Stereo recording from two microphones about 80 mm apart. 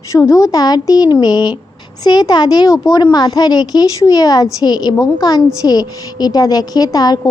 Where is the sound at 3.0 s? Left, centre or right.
Left.